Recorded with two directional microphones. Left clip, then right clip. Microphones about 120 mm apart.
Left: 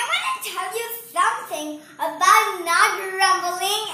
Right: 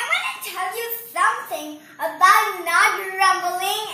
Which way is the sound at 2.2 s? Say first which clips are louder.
Right 1 dB; 20° left (ahead or behind).